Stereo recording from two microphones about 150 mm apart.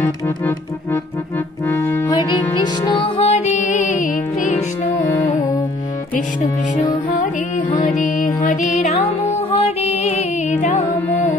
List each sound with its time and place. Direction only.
1.7 s music: 15° left (ahead or behind)
2.1 s music: 30° left (ahead or behind); by 4.1 s 55° left (ahead or behind)
7.2 s music: 65° left (ahead or behind); by 10.8 s 45° left (ahead or behind)